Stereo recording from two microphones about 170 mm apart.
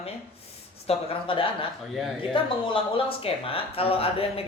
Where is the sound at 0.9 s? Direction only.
30° left (ahead or behind).